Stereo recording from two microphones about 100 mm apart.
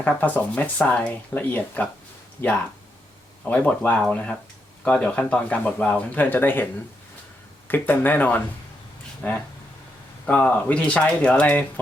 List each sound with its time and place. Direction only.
0.0 s speech: 15° left (ahead or behind)
7.7 s speech: 20° left (ahead or behind)